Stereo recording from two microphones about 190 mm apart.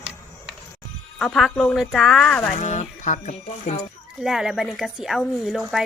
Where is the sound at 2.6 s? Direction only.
40° left (ahead or behind).